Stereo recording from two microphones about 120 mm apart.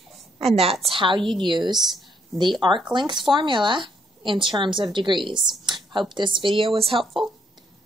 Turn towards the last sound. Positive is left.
turn(degrees=0)  # may be behind; listen again after turning